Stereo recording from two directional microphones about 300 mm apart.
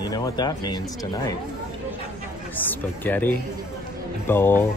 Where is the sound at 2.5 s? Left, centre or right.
Centre.